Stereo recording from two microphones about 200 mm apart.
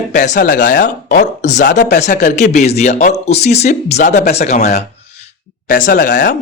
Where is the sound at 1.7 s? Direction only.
60° left (ahead or behind).